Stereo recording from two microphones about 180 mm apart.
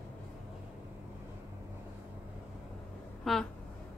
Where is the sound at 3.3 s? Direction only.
Centre (ahead or behind).